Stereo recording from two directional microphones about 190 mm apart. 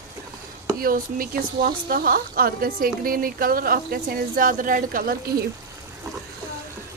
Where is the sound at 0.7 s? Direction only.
50° right (ahead or behind).